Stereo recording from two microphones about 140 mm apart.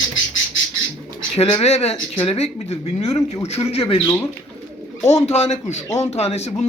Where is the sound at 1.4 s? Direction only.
50° left (ahead or behind).